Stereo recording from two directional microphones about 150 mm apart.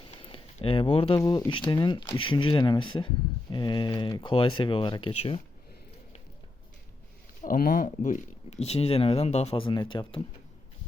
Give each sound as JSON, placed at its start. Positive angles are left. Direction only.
{"t": 0.0, "sound": "a sound", "side_deg": 35}
{"t": 1.2, "sound": "speech", "side_deg": 25}
{"t": 7.4, "sound": "speech", "side_deg": 65}